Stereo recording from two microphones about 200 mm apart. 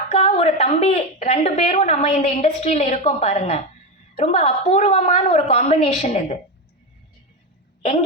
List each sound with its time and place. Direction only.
0.1 s a woman's voice: 30° left (ahead or behind)
7.8 s a woman's voice: 30° left (ahead or behind)